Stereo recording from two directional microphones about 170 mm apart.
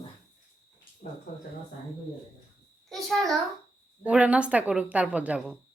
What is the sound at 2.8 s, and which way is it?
A child's voice, centre (ahead or behind).